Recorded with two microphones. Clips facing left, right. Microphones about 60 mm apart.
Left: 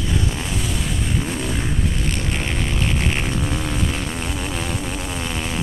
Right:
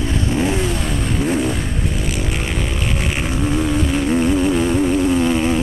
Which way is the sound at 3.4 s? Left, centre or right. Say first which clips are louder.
Right 6 dB; centre.